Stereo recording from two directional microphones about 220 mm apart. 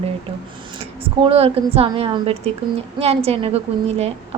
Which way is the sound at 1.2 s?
25° right (ahead or behind).